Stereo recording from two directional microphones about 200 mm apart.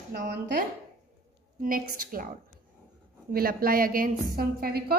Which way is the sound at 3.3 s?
50° right (ahead or behind).